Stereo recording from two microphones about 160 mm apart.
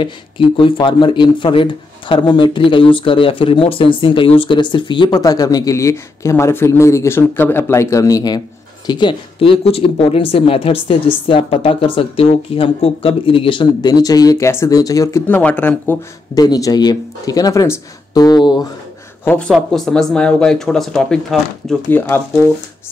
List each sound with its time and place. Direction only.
0.0 s speech: 30° left (ahead or behind); by 16.0 s 10° left (ahead or behind)
16.3 s speech: 20° left (ahead or behind)
19.2 s speech: 5° left (ahead or behind)
21.8 s speech: 15° left (ahead or behind)